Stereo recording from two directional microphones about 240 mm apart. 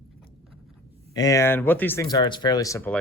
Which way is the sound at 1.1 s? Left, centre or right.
Centre.